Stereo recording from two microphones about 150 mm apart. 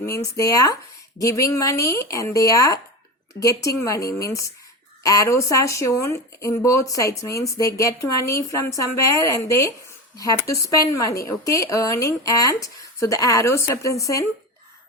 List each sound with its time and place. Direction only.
0.0 s speech: 20° left (ahead or behind)